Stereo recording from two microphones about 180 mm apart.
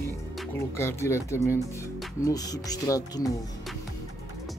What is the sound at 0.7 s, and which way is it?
Speech, 15° left (ahead or behind).